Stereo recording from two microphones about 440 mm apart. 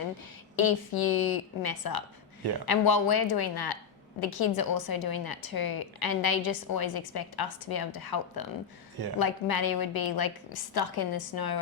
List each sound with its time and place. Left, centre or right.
0.5 s a woman's voice: left